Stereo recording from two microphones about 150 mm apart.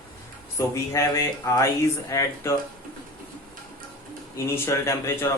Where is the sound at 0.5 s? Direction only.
20° left (ahead or behind).